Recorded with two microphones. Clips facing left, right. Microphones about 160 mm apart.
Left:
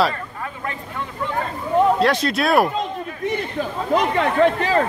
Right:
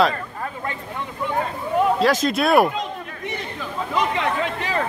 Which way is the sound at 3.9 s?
50° left (ahead or behind).